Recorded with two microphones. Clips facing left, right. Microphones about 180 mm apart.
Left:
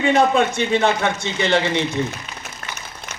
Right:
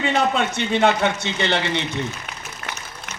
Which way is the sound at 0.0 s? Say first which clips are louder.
Left 4 dB; 50° left (ahead or behind).